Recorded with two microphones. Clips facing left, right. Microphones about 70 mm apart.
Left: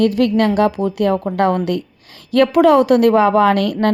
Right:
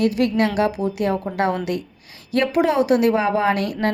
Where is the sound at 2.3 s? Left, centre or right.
Left.